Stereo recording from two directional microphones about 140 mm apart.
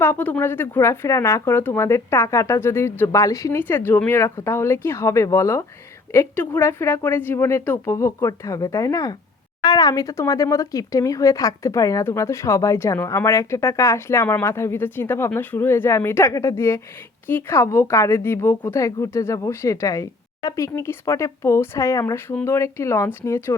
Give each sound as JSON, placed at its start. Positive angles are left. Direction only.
{"t": 0.0, "sound": "speech", "side_deg": 15}